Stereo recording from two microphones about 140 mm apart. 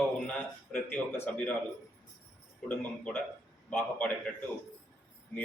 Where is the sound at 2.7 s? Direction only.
10° left (ahead or behind).